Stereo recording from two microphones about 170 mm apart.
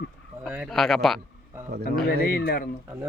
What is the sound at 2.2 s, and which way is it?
Speech, 65° left (ahead or behind).